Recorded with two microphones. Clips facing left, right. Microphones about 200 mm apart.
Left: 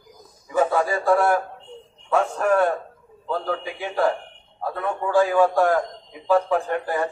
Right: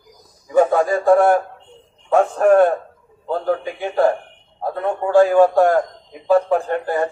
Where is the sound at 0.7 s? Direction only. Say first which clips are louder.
Right 5 dB; 40° right (ahead or behind).